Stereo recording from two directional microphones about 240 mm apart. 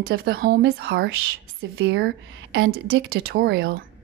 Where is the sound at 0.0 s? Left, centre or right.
Right.